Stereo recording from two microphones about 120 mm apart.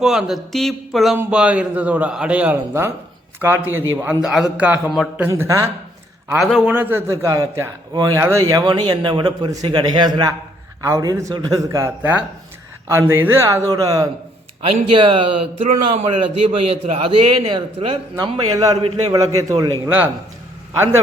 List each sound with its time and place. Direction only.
0.0 s speech: 5° right (ahead or behind)
1.1 s a man's voice: 15° right (ahead or behind)
4.2 s a man's voice: 5° right (ahead or behind)
5.4 s a man's voice: 25° right (ahead or behind)
6.3 s speech: centre (ahead or behind)
6.7 s a man's voice: 15° right (ahead or behind); by 10.2 s 40° right (ahead or behind)
10.8 s a man's voice: 25° right (ahead or behind)
14.6 s a man's voice: 50° right (ahead or behind)
18.3 s a man's voice: 30° right (ahead or behind)